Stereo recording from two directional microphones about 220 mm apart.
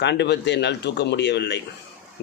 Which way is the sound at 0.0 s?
50° left (ahead or behind).